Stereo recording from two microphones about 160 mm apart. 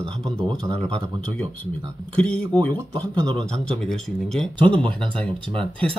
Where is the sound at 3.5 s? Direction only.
5° left (ahead or behind).